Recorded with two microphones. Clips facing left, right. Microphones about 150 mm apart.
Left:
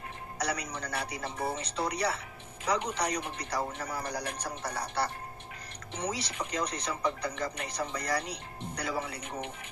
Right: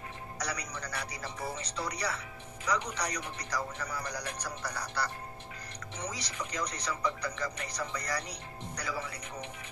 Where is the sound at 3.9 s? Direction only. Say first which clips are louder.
Left 3 dB; 55° left (ahead or behind).